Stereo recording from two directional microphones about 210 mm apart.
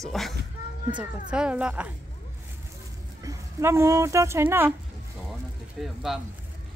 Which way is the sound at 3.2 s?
15° right (ahead or behind).